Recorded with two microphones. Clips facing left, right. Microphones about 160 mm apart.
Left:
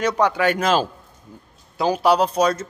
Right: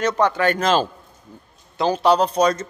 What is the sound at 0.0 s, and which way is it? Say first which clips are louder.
A man's voice: even; 10° left (ahead or behind).